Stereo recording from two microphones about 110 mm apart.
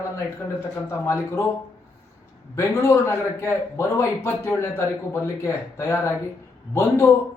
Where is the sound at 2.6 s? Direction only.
25° left (ahead or behind).